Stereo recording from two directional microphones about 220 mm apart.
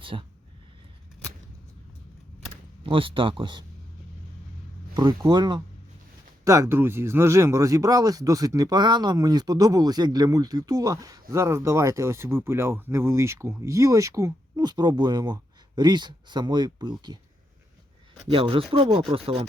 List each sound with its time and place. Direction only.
0.0 s speech: 25° right (ahead or behind)
2.8 s speech: 25° right (ahead or behind)
4.9 s speech: 20° right (ahead or behind)
18.3 s speech: 25° right (ahead or behind)